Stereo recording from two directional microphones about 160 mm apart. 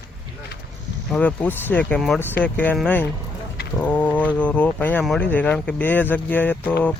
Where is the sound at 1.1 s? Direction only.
10° left (ahead or behind).